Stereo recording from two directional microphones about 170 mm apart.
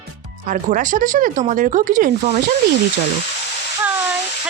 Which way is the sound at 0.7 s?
50° right (ahead or behind).